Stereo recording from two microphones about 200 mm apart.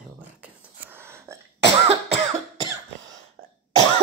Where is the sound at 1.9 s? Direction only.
25° right (ahead or behind).